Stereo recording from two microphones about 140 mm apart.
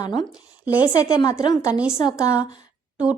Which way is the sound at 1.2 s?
25° left (ahead or behind).